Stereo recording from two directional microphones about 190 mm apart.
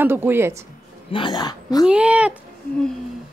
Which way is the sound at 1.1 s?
25° left (ahead or behind).